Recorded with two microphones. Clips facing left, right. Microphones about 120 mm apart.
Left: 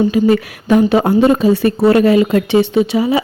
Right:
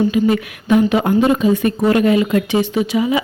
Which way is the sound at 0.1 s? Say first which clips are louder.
Left 3 dB; 40° left (ahead or behind).